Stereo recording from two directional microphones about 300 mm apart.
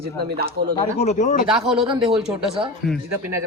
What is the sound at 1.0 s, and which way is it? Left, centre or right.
Speech, left.